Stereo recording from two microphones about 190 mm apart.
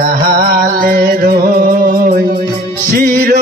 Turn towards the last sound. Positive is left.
turn(degrees=-50)  # may be behind; listen again after turning